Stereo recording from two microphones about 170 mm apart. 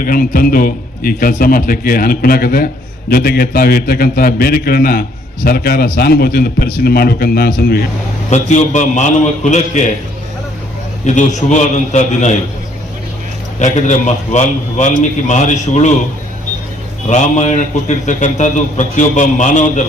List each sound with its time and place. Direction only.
0.0 s a man's voice: 55° left (ahead or behind)
8.3 s a man's voice: 45° left (ahead or behind)
11.0 s a man's voice: 45° left (ahead or behind)
13.6 s a man's voice: 45° left (ahead or behind)
17.1 s a man's voice: 45° left (ahead or behind)